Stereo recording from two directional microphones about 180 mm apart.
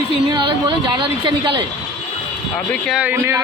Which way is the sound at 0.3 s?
25° right (ahead or behind).